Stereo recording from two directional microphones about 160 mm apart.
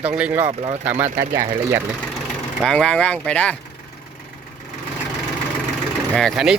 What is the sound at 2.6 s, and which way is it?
Speech, 5° left (ahead or behind).